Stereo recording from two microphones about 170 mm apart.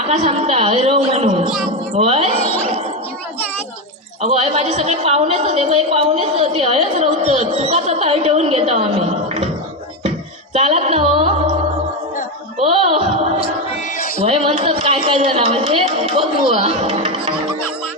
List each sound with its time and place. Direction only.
0.1 s a woman's voice: 40° right (ahead or behind)
4.2 s a sound: 40° right (ahead or behind)
10.5 s music: 35° right (ahead or behind)
12.6 s music: 35° right (ahead or behind)
14.2 s a sound: 35° right (ahead or behind)
16.6 s music: 35° right (ahead or behind)